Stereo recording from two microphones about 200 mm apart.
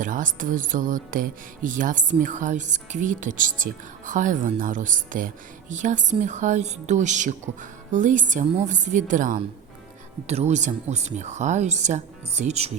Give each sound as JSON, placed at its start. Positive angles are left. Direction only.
{"t": 0.0, "sound": "speech", "side_deg": -40}